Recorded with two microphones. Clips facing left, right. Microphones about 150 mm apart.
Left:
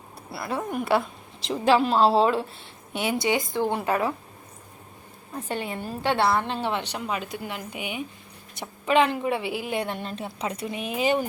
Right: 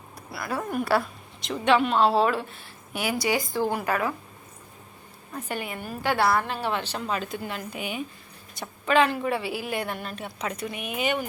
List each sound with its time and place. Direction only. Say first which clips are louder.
0.3 s a woman's voice: left 1 dB; 25° left (ahead or behind)
5.5 s a woman's voice: left 2 dB; 30° left (ahead or behind)